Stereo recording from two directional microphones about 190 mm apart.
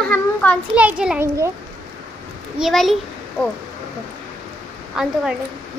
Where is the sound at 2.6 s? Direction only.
Centre (ahead or behind).